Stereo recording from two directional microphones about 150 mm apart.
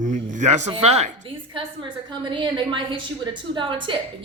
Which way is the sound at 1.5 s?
30° right (ahead or behind).